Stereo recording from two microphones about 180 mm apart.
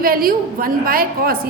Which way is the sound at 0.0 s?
55° right (ahead or behind).